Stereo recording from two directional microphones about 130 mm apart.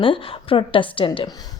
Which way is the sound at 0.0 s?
45° left (ahead or behind).